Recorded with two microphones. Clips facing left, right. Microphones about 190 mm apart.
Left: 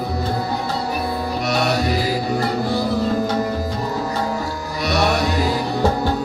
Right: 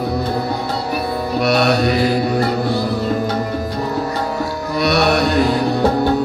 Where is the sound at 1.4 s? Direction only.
65° right (ahead or behind).